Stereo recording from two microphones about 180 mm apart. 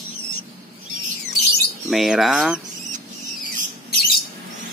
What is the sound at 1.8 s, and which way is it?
Speech, centre (ahead or behind).